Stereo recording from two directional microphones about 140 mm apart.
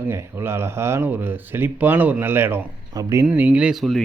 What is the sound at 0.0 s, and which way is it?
Speech, 15° right (ahead or behind).